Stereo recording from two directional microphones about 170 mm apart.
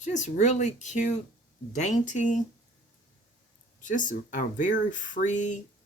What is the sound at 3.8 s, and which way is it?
Speech, 50° left (ahead or behind).